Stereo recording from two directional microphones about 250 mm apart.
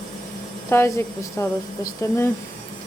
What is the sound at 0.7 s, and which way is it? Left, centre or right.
Speech, centre.